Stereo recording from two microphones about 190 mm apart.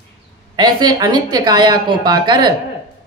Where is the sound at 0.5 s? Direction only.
20° right (ahead or behind).